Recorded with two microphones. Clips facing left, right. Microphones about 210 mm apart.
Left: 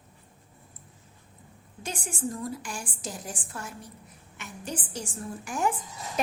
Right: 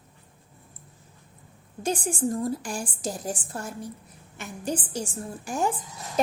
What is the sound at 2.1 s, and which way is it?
A woman's voice, 40° right (ahead or behind).